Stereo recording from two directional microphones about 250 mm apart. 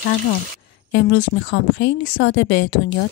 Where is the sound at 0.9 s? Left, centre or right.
Left.